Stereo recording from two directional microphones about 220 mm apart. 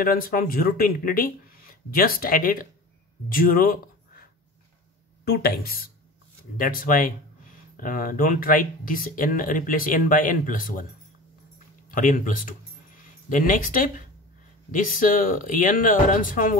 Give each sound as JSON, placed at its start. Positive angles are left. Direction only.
{"t": 0.0, "sound": "speech", "side_deg": 40}
{"t": 11.9, "sound": "speech", "side_deg": 40}